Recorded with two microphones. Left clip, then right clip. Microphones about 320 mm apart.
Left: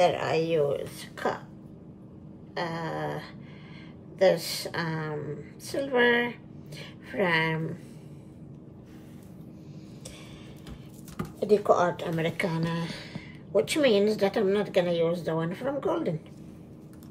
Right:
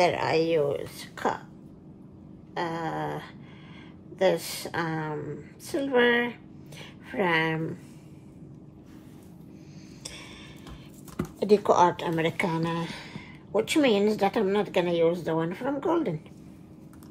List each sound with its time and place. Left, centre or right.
0.0 s speech: right
2.5 s speech: centre
11.4 s speech: right